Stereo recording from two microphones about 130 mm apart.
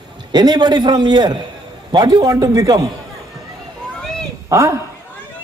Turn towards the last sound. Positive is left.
turn(degrees=-25)  # may be behind; listen again after turning